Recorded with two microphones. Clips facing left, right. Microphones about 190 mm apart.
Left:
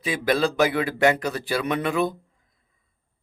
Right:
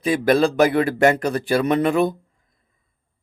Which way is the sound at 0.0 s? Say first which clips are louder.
Right 6 dB; 50° right (ahead or behind).